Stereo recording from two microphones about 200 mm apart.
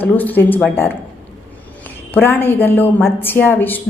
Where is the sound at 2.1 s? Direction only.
10° left (ahead or behind).